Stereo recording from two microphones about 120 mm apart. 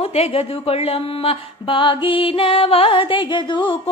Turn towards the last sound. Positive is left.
turn(degrees=45)  # may be behind; listen again after turning